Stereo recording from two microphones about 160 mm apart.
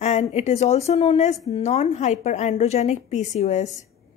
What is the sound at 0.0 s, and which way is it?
Speech, 45° left (ahead or behind).